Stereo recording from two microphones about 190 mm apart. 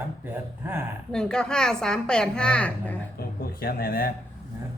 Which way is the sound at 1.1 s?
5° left (ahead or behind).